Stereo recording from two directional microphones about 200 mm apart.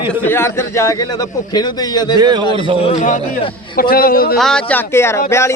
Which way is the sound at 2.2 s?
20° right (ahead or behind).